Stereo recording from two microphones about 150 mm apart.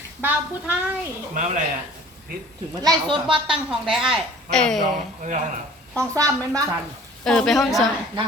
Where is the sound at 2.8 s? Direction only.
30° right (ahead or behind).